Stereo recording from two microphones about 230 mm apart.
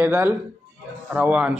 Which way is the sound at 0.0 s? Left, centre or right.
Centre.